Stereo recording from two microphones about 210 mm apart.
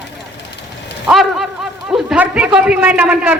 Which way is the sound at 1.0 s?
Centre (ahead or behind).